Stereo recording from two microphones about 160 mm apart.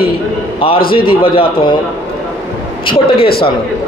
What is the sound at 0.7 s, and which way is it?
Speech, 70° left (ahead or behind).